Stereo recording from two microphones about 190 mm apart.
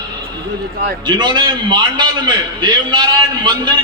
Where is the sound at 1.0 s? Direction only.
25° right (ahead or behind).